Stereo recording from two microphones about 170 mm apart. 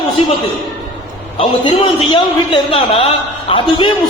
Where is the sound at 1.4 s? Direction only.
30° left (ahead or behind).